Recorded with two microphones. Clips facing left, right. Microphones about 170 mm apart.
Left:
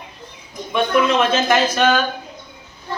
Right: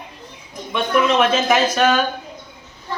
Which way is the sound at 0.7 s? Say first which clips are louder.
Left 1 dB; centre (ahead or behind).